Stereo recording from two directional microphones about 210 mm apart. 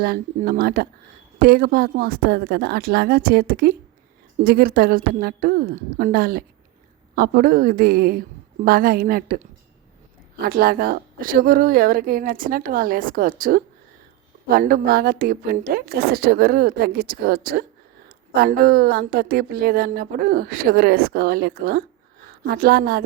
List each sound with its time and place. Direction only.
0.0 s a woman's voice: 45° right (ahead or behind)